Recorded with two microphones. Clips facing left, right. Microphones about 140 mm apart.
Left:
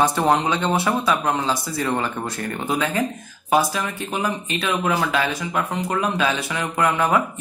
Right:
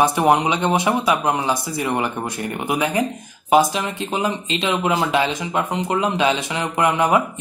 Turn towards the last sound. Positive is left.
turn(degrees=-20)  # may be behind; listen again after turning